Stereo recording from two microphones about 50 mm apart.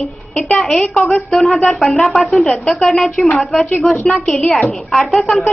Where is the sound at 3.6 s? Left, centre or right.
Left.